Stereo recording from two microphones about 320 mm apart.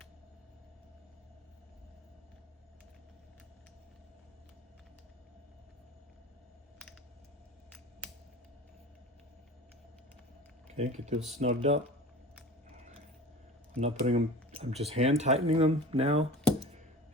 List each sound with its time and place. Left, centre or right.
10.8 s speech: right
13.7 s speech: centre